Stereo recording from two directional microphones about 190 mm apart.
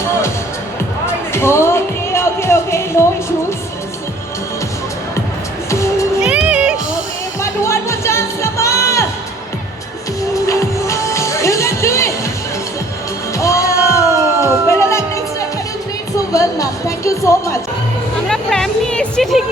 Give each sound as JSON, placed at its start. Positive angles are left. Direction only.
{"t": 1.3, "sound": "music", "side_deg": 15}
{"t": 6.2, "sound": "music", "side_deg": -5}
{"t": 7.4, "sound": "music", "side_deg": 15}
{"t": 10.3, "sound": "music", "side_deg": 15}
{"t": 13.3, "sound": "music", "side_deg": 15}
{"t": 18.3, "sound": "music", "side_deg": 5}